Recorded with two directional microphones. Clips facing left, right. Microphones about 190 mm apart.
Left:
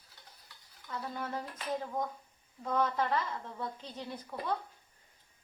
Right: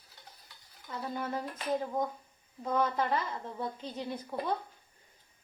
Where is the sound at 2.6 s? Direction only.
20° right (ahead or behind).